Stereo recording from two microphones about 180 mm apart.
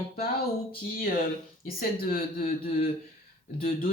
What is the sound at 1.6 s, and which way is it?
Speech, 55° left (ahead or behind).